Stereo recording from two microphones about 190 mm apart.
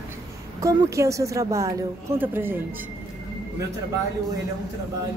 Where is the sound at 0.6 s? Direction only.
15° right (ahead or behind).